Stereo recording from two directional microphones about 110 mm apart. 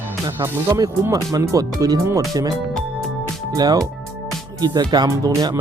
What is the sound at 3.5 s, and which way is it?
Speech, 35° right (ahead or behind).